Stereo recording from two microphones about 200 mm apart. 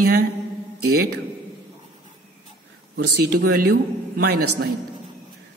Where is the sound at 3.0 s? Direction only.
50° right (ahead or behind).